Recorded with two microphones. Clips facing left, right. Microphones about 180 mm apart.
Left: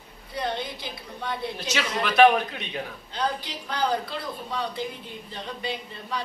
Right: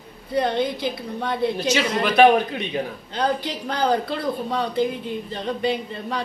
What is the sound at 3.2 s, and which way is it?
Speech, 60° right (ahead or behind).